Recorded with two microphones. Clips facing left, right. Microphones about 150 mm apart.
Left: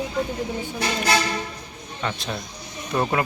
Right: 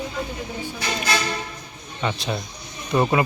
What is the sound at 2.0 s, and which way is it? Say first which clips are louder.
A man's voice: right 3 dB; 5° right (ahead or behind).